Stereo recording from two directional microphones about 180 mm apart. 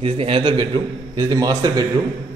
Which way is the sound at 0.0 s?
30° right (ahead or behind).